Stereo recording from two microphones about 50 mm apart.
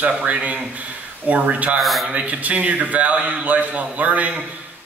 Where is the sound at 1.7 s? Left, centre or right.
Centre.